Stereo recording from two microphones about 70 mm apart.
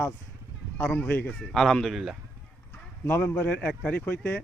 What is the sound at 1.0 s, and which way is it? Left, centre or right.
Speech, left.